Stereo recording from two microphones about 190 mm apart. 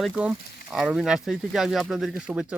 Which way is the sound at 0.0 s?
5° right (ahead or behind).